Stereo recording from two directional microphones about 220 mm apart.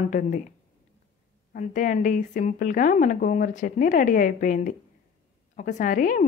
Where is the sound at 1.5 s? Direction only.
35° left (ahead or behind).